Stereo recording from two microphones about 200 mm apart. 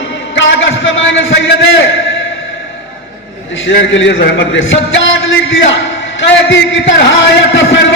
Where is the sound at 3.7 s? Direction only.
65° left (ahead or behind).